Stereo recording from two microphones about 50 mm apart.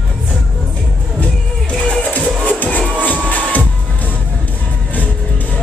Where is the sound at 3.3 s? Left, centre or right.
Left.